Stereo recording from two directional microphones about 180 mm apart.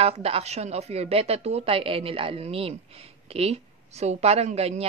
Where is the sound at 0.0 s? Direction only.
35° right (ahead or behind).